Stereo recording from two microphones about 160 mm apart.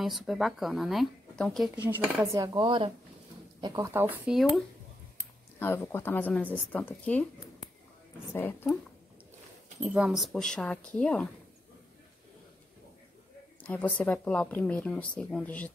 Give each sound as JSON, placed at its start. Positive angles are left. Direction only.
{"t": 0.0, "sound": "speech", "side_deg": 0}
{"t": 1.8, "sound": "speech", "side_deg": -10}
{"t": 2.4, "sound": "speech", "side_deg": -25}
{"t": 5.6, "sound": "speech", "side_deg": 15}
{"t": 8.3, "sound": "speech", "side_deg": 15}
{"t": 9.8, "sound": "speech", "side_deg": -5}
{"t": 13.6, "sound": "speech", "side_deg": 10}